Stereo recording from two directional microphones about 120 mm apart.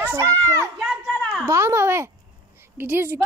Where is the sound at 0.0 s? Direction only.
25° right (ahead or behind).